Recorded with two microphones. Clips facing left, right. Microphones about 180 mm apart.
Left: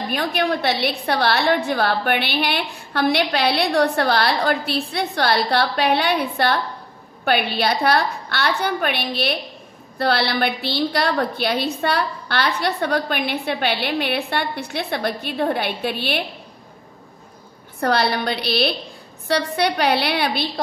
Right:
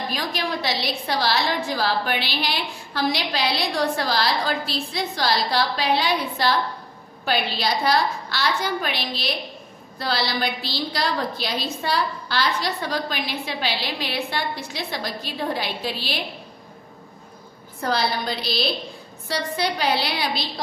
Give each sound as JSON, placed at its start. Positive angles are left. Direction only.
{"t": 0.1, "sound": "a woman's voice", "side_deg": 60}
{"t": 17.7, "sound": "a woman's voice", "side_deg": 65}